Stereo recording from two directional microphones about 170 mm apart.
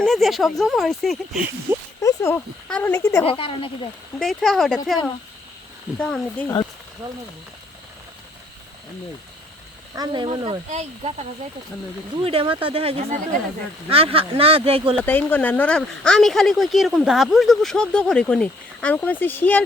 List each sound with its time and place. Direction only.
0.0 s speech: centre (ahead or behind)
2.0 s speech: 15° left (ahead or behind)
3.2 s speech: 30° left (ahead or behind)
4.2 s speech: centre (ahead or behind)
6.0 s speech: 5° left (ahead or behind)
9.9 s speech: 25° right (ahead or behind)
15.0 s speech: 10° left (ahead or behind)